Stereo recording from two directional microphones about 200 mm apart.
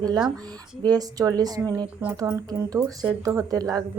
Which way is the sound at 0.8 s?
20° right (ahead or behind).